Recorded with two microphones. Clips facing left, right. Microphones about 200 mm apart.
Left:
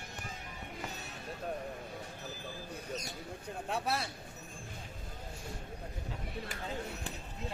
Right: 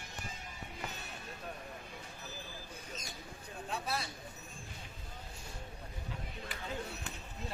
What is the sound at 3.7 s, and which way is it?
Speech, 60° left (ahead or behind).